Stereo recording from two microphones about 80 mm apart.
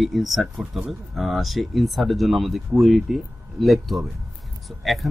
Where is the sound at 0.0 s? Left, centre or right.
Centre.